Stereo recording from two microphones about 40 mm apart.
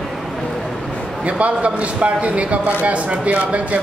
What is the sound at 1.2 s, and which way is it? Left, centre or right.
A man's voice, right.